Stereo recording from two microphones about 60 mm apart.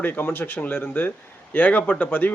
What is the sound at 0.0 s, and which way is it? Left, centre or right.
A man's voice, left.